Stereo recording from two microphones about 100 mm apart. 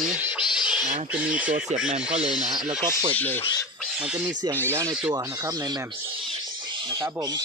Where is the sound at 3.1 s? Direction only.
20° left (ahead or behind).